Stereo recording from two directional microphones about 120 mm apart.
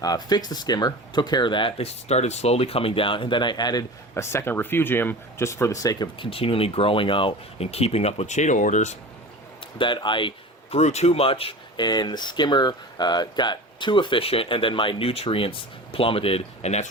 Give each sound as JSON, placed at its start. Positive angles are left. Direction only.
{"t": 0.0, "sound": "speech", "side_deg": 35}
{"t": 4.1, "sound": "speech", "side_deg": 20}
{"t": 6.1, "sound": "speech", "side_deg": 50}
{"t": 9.7, "sound": "speech", "side_deg": 40}
{"t": 10.8, "sound": "speech", "side_deg": 65}
{"t": 11.9, "sound": "speech", "side_deg": 35}